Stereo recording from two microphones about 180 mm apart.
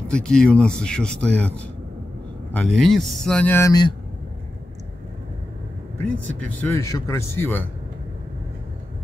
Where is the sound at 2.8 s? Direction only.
Centre (ahead or behind); by 3.9 s 20° left (ahead or behind).